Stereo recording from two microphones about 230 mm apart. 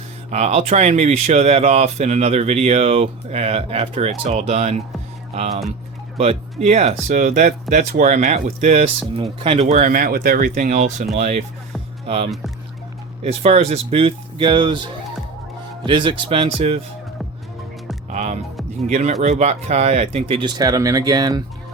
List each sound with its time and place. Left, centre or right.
0.3 s speech: right
15.8 s speech: right
18.1 s music: right
18.9 s speech: right